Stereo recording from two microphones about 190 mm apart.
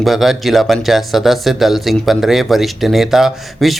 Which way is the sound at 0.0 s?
Centre (ahead or behind).